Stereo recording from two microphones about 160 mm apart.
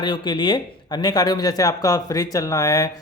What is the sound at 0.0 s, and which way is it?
Speech, 30° left (ahead or behind).